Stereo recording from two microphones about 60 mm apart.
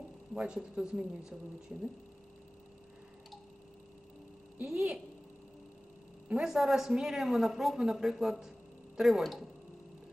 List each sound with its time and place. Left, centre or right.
0.3 s speech: centre
4.6 s speech: centre
6.4 s speech: centre